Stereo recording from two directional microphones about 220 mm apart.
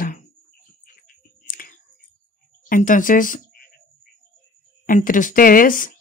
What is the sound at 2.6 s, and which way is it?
Speech, 35° left (ahead or behind).